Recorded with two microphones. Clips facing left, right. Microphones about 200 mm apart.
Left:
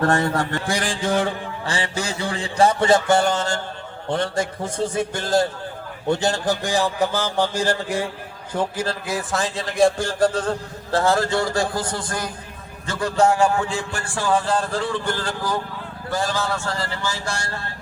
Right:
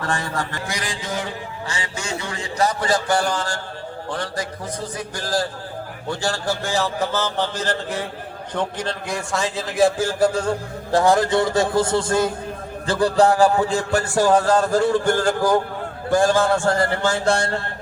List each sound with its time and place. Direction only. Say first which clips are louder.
0.0 s a man's voice: left 6 dB; 60° left (ahead or behind)
0.6 s a man's voice: left 5 dB; 30° left (ahead or behind); by 17.6 s 55° right (ahead or behind)